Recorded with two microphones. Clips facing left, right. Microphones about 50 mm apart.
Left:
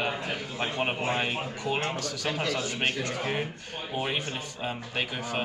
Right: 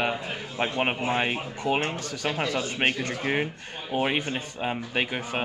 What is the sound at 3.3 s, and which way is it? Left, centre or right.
A man's voice, right.